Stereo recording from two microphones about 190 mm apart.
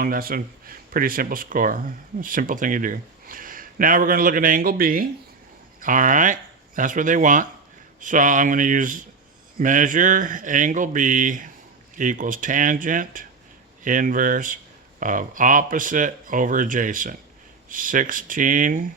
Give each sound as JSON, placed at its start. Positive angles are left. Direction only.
{"t": 0.0, "sound": "speech", "side_deg": -50}